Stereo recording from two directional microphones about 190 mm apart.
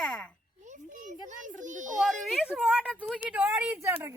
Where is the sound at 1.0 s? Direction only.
40° right (ahead or behind).